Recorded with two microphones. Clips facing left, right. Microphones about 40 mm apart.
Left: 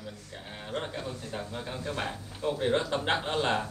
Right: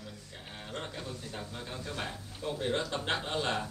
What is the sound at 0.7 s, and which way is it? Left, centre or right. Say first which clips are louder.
A man's voice: left 6 dB; centre.